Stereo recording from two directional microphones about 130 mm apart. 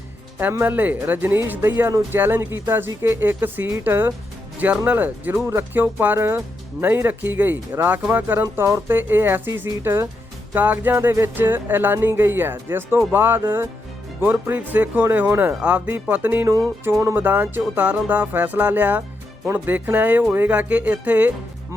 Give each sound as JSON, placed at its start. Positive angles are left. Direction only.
{"t": 0.5, "sound": "speech", "side_deg": -15}